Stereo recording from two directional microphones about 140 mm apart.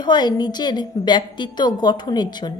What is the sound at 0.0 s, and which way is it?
Speech, 30° left (ahead or behind).